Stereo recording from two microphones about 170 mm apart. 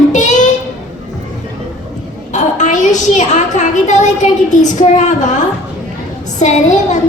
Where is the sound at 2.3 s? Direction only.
45° left (ahead or behind).